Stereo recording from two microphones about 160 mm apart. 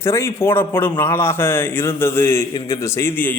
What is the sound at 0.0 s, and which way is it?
A man's voice, 15° left (ahead or behind).